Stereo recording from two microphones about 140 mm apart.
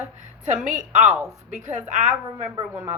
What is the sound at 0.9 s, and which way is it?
A woman's voice, 55° right (ahead or behind).